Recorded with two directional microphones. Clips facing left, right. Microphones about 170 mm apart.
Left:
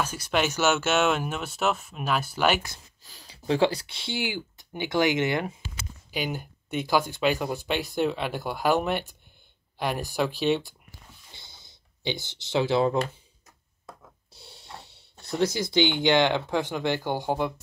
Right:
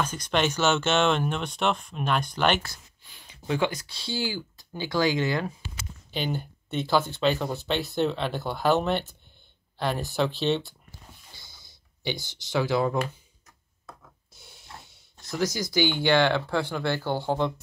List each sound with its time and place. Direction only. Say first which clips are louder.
0.0 s speech: even; 10° left (ahead or behind)
3.0 s speech: left 1 dB; 40° left (ahead or behind); by 5.5 s 20° left (ahead or behind)
6.1 s speech: right 1 dB; 10° left (ahead or behind)
11.3 s a sound: left 1 dB; 25° left (ahead or behind)
14.3 s speech: left 3 dB; 30° left (ahead or behind); by 17.5 s 15° left (ahead or behind)